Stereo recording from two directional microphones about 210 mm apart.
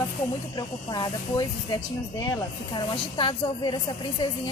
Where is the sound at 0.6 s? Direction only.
20° left (ahead or behind).